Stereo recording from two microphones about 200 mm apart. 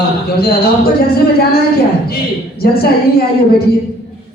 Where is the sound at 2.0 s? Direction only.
50° left (ahead or behind).